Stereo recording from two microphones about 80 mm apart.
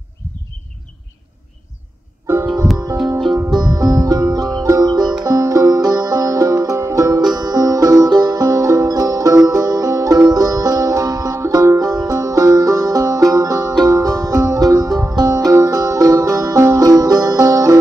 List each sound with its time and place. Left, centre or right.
3.4 s music: right
5.2 s music: right
7.3 s music: right
11.8 s music: right